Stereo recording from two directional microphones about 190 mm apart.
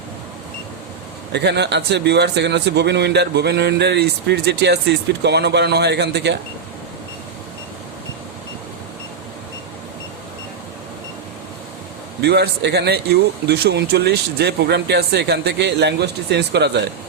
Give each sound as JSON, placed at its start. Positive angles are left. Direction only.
{"t": 1.3, "sound": "speech", "side_deg": -65}
{"t": 12.2, "sound": "speech", "side_deg": -60}